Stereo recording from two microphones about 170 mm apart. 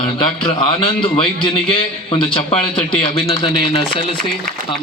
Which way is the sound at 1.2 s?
30° left (ahead or behind).